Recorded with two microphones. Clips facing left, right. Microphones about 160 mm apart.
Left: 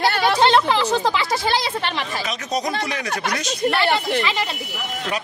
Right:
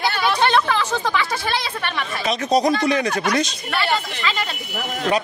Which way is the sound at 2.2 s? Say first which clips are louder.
Right 10 dB; 30° right (ahead or behind).